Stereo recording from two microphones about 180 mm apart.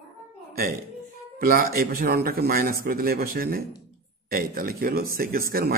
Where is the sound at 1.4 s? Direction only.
55° right (ahead or behind).